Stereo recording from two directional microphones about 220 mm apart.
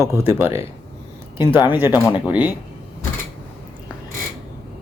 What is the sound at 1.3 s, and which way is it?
Speech, 10° right (ahead or behind).